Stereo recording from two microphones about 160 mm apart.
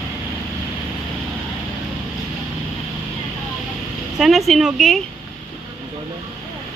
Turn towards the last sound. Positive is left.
turn(degrees=0)  # may be behind; listen again after turning